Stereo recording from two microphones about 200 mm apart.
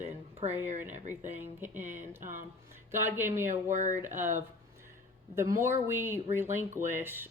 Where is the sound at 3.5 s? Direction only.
35° right (ahead or behind).